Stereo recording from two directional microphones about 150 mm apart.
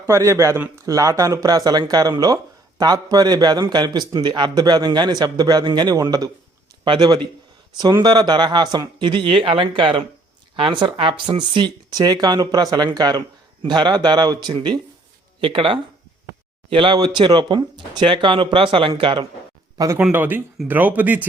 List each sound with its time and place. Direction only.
0.0 s speech: 20° right (ahead or behind); by 19.2 s 35° right (ahead or behind)
20.0 s speech: 10° right (ahead or behind)